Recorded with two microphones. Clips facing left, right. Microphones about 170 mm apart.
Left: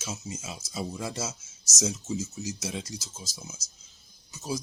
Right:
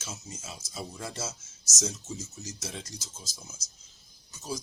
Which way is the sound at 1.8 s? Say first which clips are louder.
Left 5 dB; 5° left (ahead or behind).